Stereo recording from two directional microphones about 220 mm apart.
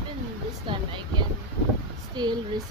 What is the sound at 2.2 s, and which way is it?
Speech, 20° right (ahead or behind).